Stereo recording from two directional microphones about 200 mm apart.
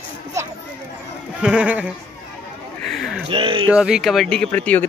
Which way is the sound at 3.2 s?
25° right (ahead or behind).